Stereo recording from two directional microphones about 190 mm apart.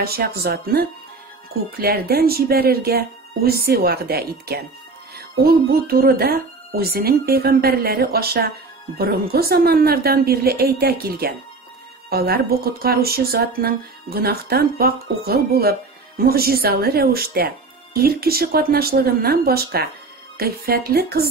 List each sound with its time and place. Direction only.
0.0 s speech: 55° right (ahead or behind)